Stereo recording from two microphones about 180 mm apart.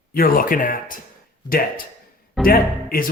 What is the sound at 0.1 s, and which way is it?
A man's voice, 50° left (ahead or behind).